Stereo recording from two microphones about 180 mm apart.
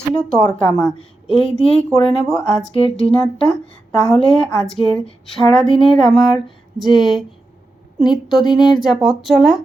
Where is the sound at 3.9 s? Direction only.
5° left (ahead or behind).